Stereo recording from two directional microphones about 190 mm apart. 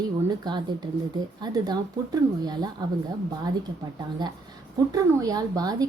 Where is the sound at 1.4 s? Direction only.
20° right (ahead or behind).